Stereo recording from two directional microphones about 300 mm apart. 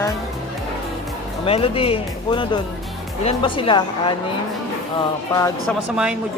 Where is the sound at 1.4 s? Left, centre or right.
Centre.